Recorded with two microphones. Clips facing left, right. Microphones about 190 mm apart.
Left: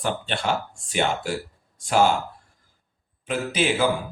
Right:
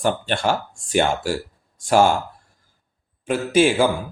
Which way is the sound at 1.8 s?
50° right (ahead or behind).